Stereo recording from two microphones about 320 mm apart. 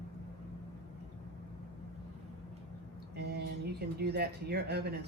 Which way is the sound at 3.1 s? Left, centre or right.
Right.